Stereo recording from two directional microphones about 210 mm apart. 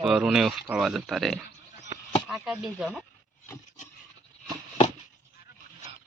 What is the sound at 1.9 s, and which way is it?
Chop, 15° right (ahead or behind).